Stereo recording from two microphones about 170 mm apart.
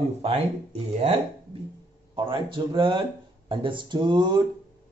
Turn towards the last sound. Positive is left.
turn(degrees=-25)  # may be behind; listen again after turning